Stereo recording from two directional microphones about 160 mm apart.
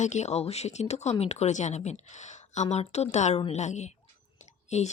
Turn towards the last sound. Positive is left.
turn(degrees=45)  # may be behind; listen again after turning